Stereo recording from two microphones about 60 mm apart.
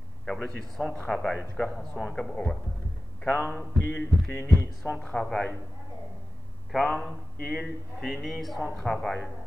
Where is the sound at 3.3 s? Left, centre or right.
Left.